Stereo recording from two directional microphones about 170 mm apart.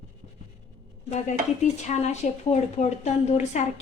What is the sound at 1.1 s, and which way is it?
Speech, 45° left (ahead or behind).